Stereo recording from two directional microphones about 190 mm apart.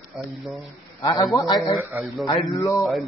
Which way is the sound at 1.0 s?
20° left (ahead or behind).